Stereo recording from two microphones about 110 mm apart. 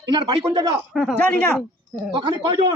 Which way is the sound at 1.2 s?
10° left (ahead or behind).